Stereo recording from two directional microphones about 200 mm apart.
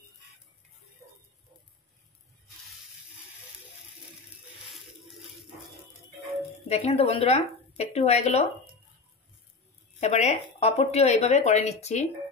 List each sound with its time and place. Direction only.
5.1 s a sound: centre (ahead or behind)
6.7 s speech: 30° left (ahead or behind)
9.9 s speech: 35° left (ahead or behind)